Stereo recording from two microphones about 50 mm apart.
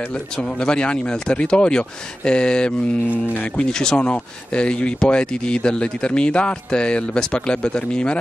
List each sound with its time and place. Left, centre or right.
0.1 s speech: left